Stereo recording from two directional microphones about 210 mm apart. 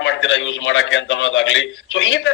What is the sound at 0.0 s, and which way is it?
A man's voice, 65° left (ahead or behind).